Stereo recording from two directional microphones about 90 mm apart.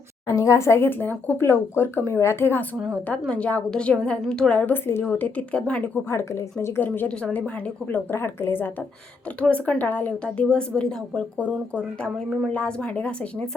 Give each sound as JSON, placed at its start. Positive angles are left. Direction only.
{"t": 0.3, "sound": "speech", "side_deg": 35}
{"t": 3.1, "sound": "a woman's voice", "side_deg": 15}
{"t": 6.1, "sound": "a woman's voice", "side_deg": 30}
{"t": 9.4, "sound": "a woman's voice", "side_deg": 15}